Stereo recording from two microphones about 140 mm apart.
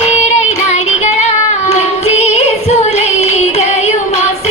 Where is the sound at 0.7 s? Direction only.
50° left (ahead or behind).